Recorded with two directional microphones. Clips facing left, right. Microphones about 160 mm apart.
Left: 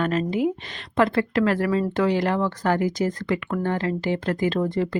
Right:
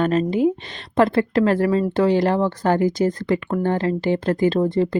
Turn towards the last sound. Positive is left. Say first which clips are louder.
# right 5 dB
turn(degrees=-30)  # may be behind; listen again after turning